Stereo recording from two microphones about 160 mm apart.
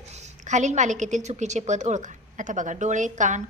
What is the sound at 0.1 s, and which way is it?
A woman's voice, 45° right (ahead or behind).